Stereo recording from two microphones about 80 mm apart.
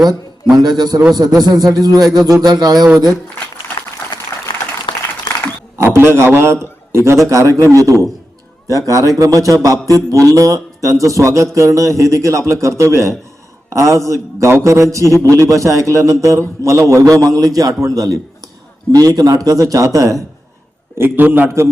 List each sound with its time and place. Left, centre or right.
0.6 s a man's voice: right
4.9 s applause: left
5.3 s a sound: left
5.7 s a man's voice: right
21.0 s a man's voice: right